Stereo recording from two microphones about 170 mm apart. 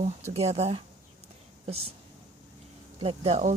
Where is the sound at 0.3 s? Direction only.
40° right (ahead or behind).